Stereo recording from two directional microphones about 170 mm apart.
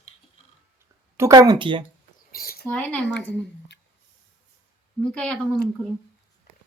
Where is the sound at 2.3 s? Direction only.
60° left (ahead or behind).